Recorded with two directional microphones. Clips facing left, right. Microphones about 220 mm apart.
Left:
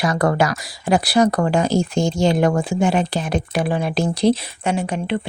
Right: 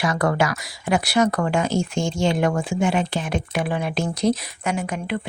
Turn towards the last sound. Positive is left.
turn(degrees=30)  # may be behind; listen again after turning